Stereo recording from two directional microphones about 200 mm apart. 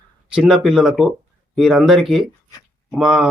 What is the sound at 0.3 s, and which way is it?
Speech, 5° right (ahead or behind).